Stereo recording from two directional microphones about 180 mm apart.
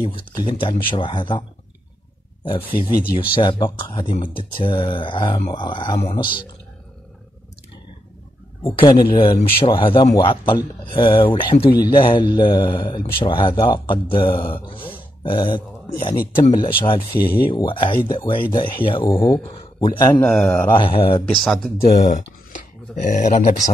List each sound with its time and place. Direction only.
0.0 s speech: 25° left (ahead or behind)
2.4 s speech: 25° left (ahead or behind)
8.7 s speech: 20° left (ahead or behind)
19.0 s speech: 15° left (ahead or behind)
19.4 s speech: 30° left (ahead or behind)
20.2 s speech: 10° left (ahead or behind)
20.7 s speech: 30° left (ahead or behind)
22.5 s speech: 45° left (ahead or behind)